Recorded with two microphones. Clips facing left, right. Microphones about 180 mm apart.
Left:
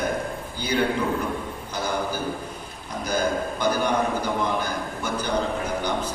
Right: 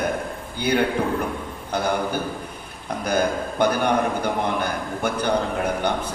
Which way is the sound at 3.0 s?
60° right (ahead or behind).